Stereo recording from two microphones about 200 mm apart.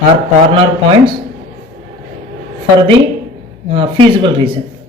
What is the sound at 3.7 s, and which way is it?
Speech, 25° right (ahead or behind).